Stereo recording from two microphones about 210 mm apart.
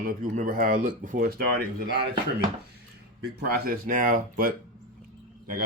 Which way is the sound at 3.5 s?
45° right (ahead or behind).